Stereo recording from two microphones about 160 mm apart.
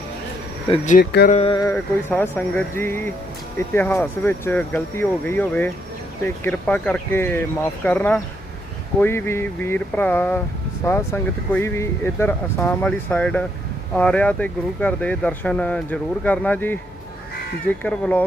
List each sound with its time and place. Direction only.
0.9 s speech: 75° left (ahead or behind)
1.5 s a sound: 25° left (ahead or behind)
1.7 s speech: 10° left (ahead or behind)
17.8 s speech: 10° left (ahead or behind)